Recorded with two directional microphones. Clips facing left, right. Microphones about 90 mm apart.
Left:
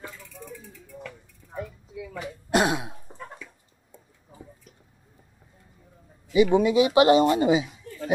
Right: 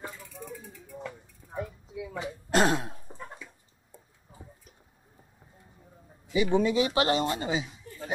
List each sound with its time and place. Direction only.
0.0 s mechanisms: 15° right (ahead or behind)
2.5 s throat clearing: 10° left (ahead or behind)
6.3 s speech: 15° left (ahead or behind)